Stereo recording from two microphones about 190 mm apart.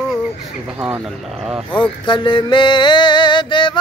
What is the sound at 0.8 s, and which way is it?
Speech, 5° right (ahead or behind).